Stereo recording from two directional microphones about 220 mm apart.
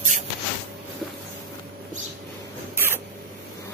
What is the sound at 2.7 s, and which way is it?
Rodents, 10° right (ahead or behind).